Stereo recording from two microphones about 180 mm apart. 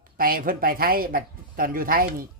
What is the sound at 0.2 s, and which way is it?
Speech, 50° right (ahead or behind).